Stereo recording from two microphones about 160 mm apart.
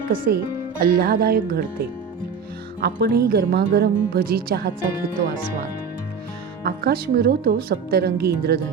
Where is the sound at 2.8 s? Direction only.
80° right.